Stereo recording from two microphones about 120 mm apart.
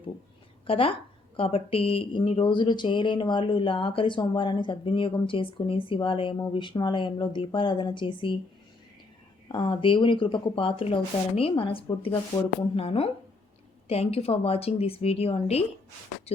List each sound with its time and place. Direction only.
0.7 s speech: 50° left (ahead or behind)
9.5 s speech: 45° left (ahead or behind); by 15.6 s 60° left (ahead or behind)